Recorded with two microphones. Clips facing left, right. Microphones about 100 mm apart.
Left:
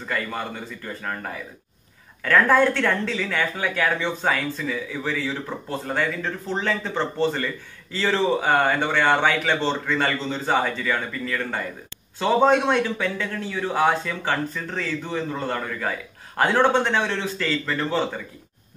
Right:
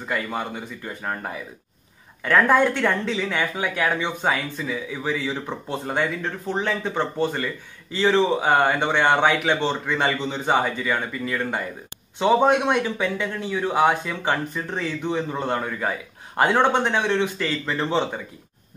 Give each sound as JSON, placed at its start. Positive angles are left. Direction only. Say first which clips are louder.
{"t": 0.0, "sound": "speech", "louder": "right 1 dB", "side_deg": -15}